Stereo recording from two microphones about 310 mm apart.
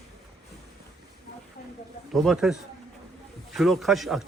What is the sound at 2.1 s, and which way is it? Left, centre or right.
Speech, centre.